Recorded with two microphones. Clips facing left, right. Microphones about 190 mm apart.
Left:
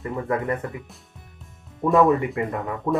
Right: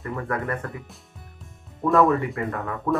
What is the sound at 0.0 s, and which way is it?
Speech, 20° left (ahead or behind).